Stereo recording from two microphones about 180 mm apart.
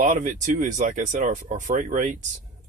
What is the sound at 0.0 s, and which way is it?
Speech, 45° right (ahead or behind).